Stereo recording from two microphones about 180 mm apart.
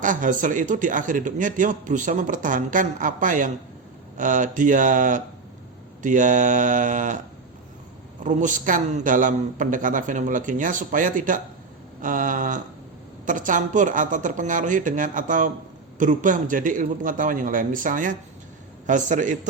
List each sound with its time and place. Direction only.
0.0 s a man's voice: 45° right (ahead or behind)
8.2 s a man's voice: 45° right (ahead or behind)